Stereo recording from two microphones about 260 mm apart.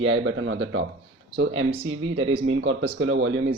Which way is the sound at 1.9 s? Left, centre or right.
Right.